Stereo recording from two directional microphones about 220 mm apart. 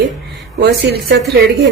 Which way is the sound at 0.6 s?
50° right (ahead or behind).